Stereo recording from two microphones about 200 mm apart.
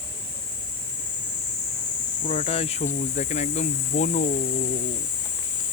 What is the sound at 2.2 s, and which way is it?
Speech, 30° left (ahead or behind).